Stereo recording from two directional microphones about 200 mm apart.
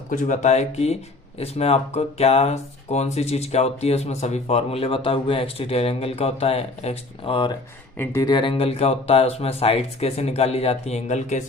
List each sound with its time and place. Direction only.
0.1 s speech: 40° left (ahead or behind)
7.9 s speech: 10° left (ahead or behind); by 11.4 s 35° left (ahead or behind)